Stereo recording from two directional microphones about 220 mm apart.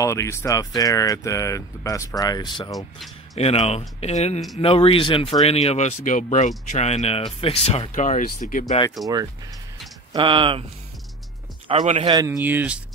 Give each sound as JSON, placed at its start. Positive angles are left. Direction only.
{"t": 0.0, "sound": "speech", "side_deg": 15}
{"t": 10.1, "sound": "speech", "side_deg": -20}
{"t": 11.6, "sound": "speech", "side_deg": -25}
{"t": 12.1, "sound": "speech", "side_deg": -15}